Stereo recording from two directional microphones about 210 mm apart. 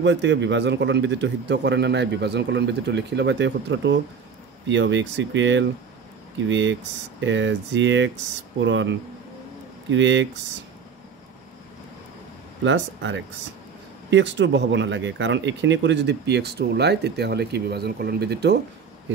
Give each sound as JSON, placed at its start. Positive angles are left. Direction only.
{"t": 0.0, "sound": "a man's voice", "side_deg": -55}
{"t": 9.8, "sound": "a man's voice", "side_deg": -60}
{"t": 12.6, "sound": "a man's voice", "side_deg": -60}